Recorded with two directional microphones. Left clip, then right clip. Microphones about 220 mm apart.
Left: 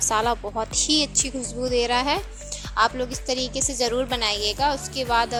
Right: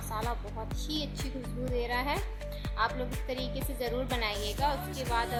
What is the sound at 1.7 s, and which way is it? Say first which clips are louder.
A woman's voice: left 10 dB; 30° left (ahead or behind).